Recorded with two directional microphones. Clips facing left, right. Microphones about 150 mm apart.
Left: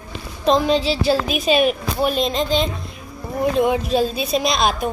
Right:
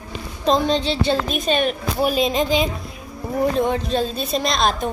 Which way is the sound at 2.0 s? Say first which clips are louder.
Right 3 dB; 5° right (ahead or behind).